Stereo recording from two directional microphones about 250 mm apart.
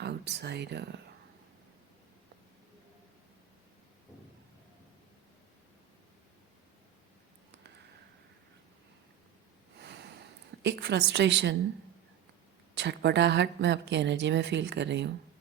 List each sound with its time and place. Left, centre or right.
0.0 s speech: right
9.8 s a sound: right
11.1 s a woman's voice: right
12.7 s a woman's voice: right